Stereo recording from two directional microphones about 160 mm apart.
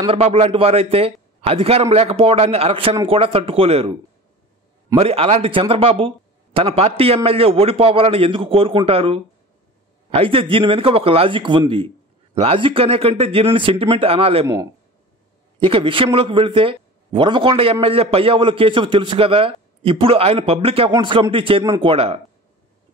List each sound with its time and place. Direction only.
0.0 s a man's voice: 40° right (ahead or behind)
4.9 s a man's voice: 40° right (ahead or behind)
14.4 s a man's voice: 15° right (ahead or behind)
15.6 s a man's voice: 35° right (ahead or behind)